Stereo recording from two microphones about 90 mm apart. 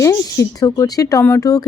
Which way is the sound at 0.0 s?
35° left (ahead or behind).